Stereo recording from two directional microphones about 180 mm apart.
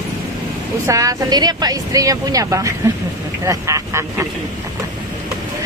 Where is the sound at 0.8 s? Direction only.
20° right (ahead or behind).